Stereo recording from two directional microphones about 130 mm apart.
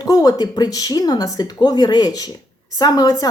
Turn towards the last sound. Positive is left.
turn(degrees=30)  # may be behind; listen again after turning